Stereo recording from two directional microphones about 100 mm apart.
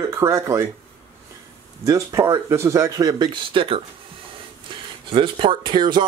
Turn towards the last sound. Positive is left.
turn(degrees=-50)  # may be behind; listen again after turning